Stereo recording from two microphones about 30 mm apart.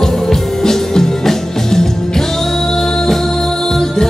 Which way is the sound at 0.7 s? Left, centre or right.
Centre.